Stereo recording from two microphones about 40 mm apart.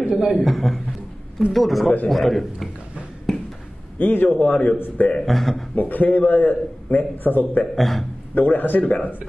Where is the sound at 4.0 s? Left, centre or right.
Left.